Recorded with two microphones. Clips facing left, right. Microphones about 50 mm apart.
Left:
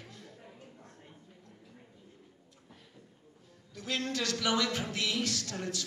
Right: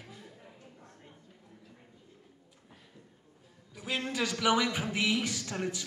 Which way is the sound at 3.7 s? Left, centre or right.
Centre.